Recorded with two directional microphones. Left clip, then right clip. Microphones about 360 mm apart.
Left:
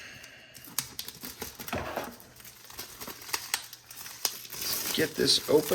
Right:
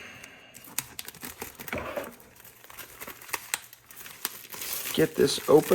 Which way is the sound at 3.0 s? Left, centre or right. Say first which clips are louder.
Even; centre.